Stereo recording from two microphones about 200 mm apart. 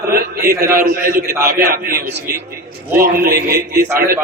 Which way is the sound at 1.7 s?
45° right (ahead or behind).